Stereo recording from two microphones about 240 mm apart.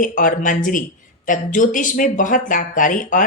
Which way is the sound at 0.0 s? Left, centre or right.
Left.